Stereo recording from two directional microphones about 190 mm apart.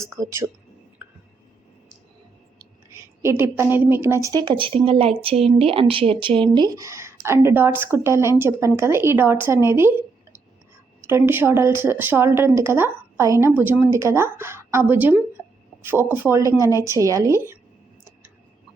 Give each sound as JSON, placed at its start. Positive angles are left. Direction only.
{"t": 0.0, "sound": "a woman's voice", "side_deg": -15}
{"t": 2.6, "sound": "a woman's voice", "side_deg": -15}
{"t": 11.0, "sound": "a woman's voice", "side_deg": -10}